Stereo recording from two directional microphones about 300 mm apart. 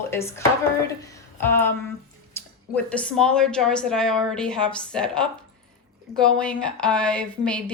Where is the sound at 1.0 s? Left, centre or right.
Centre.